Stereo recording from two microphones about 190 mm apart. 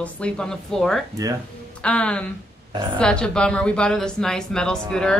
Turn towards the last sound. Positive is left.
turn(degrees=5)  # may be behind; listen again after turning